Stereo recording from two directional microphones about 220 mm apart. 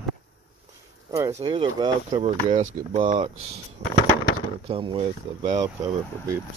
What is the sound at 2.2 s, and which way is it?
Speech, 30° right (ahead or behind).